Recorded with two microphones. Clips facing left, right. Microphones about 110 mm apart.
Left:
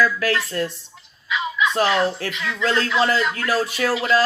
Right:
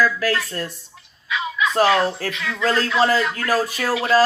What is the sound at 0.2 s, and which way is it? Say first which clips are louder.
Speech: left 1 dB; 35° right (ahead or behind).